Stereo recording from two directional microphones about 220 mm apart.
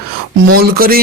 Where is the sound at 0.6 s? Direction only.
40° right (ahead or behind).